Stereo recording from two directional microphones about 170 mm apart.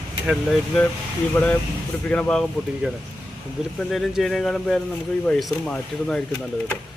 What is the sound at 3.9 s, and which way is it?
Speech, centre (ahead or behind).